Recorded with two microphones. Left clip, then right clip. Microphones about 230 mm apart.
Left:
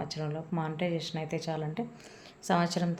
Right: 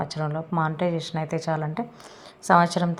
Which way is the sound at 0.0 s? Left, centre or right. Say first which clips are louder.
Right 8 dB; centre.